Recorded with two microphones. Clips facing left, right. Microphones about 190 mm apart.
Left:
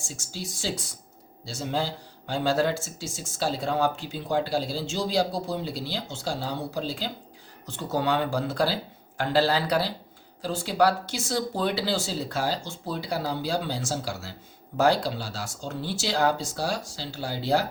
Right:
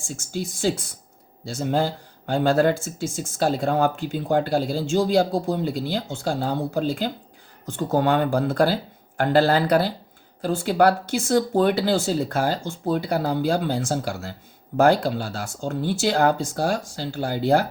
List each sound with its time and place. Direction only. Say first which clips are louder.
0.1 s speech: right 9 dB; 55° right (ahead or behind)